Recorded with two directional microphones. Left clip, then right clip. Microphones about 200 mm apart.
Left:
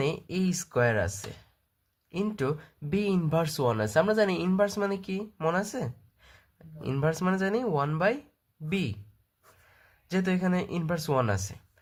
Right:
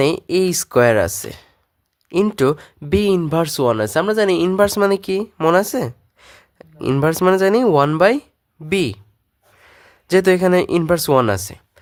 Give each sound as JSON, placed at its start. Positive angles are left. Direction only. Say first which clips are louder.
{"t": 0.0, "sound": "speech", "louder": "right 14 dB", "side_deg": -45}